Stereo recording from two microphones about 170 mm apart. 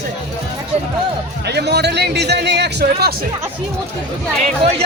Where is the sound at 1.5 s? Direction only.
75° right (ahead or behind).